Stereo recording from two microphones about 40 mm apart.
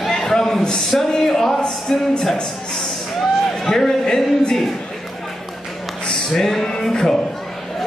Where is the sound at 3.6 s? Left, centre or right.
Centre.